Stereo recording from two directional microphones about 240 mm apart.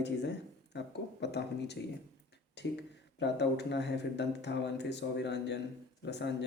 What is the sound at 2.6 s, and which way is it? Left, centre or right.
Speech, left.